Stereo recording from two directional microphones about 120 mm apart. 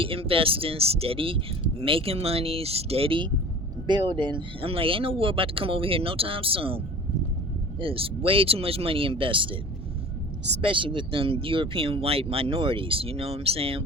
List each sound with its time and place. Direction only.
0.0 s speech: 50° right (ahead or behind)
3.8 s speech: 40° right (ahead or behind)
10.6 s speech: 45° right (ahead or behind)